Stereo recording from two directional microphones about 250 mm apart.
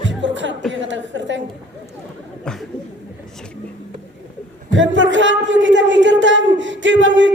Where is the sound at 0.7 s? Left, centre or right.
Right.